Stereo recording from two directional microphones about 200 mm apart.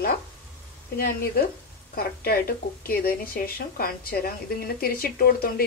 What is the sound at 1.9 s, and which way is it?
Speech, 50° left (ahead or behind).